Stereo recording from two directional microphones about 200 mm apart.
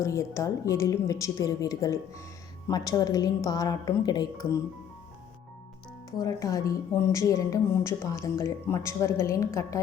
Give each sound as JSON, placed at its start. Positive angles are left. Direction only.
{"t": 0.0, "sound": "a woman's voice", "side_deg": 15}
{"t": 6.1, "sound": "speech", "side_deg": 15}